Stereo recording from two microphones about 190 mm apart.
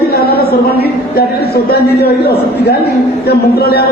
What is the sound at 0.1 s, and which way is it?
A woman's voice, 55° left (ahead or behind).